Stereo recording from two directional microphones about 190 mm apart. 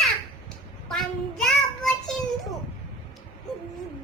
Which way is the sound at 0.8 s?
Centre (ahead or behind).